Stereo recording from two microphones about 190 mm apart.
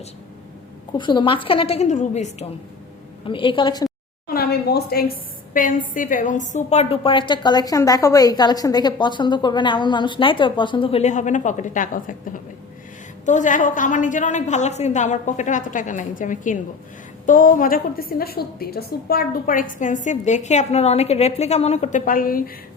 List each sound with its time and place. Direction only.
0.9 s a woman's voice: 25° left (ahead or behind)
3.2 s a woman's voice: 25° left (ahead or behind)
4.3 s a sound: 55° left (ahead or behind)
5.5 s a woman's voice: 45° left (ahead or behind)